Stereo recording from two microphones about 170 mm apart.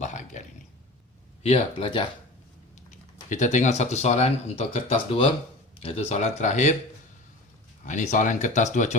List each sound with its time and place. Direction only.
0.0 s a sound: 45° left (ahead or behind)
1.4 s speech: 40° left (ahead or behind)
3.2 s speech: 45° left (ahead or behind)
7.9 s speech: 50° left (ahead or behind)